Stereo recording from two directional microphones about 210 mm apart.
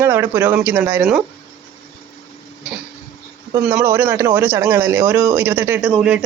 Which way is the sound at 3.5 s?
10° right (ahead or behind).